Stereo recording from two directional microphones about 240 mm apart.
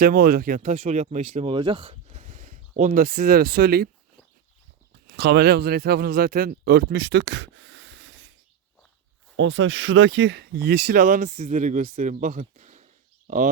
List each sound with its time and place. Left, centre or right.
0.0 s speech: right
5.1 s speech: right
9.3 s speech: right